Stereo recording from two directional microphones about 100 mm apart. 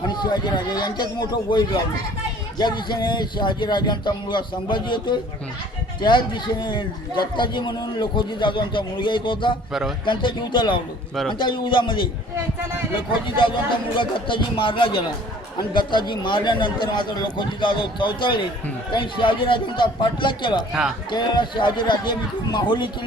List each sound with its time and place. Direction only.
0.1 s a man's voice: 45° left (ahead or behind)
11.1 s a man's voice: centre (ahead or behind)
11.3 s a man's voice: 55° left (ahead or behind)
13.2 s speech: 55° left (ahead or behind)
15.7 s a man's voice: 50° left (ahead or behind)